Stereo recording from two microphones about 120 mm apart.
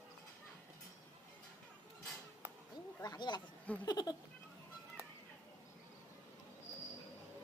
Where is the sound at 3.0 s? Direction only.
35° left (ahead or behind).